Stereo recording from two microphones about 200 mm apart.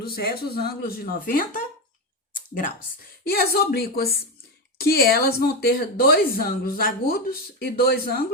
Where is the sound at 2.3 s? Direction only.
40° left (ahead or behind).